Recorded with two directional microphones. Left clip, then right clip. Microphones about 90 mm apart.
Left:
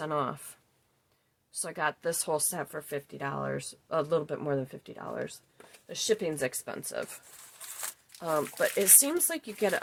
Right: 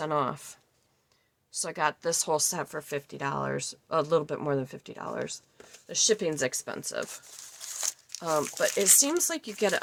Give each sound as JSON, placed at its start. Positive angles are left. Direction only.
{"t": 0.0, "sound": "speech", "side_deg": -30}
{"t": 1.6, "sound": "speech", "side_deg": -30}
{"t": 5.9, "sound": "speech", "side_deg": -45}
{"t": 8.2, "sound": "speech", "side_deg": -20}
{"t": 8.6, "sound": "speech", "side_deg": -10}
{"t": 9.0, "sound": "speech", "side_deg": -30}